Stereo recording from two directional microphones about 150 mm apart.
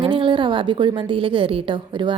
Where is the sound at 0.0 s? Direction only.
35° right (ahead or behind).